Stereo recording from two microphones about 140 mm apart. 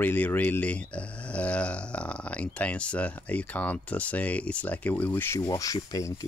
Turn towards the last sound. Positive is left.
turn(degrees=25)  # may be behind; listen again after turning